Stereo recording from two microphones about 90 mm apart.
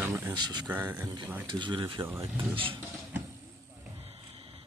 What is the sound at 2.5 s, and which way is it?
Speech, 75° right (ahead or behind).